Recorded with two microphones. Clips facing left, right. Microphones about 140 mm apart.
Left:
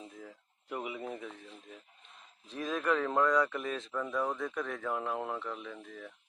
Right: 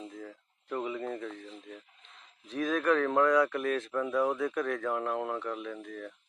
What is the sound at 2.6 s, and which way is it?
A man's voice, centre (ahead or behind).